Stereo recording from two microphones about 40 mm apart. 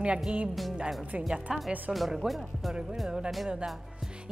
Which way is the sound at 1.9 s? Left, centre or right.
Centre.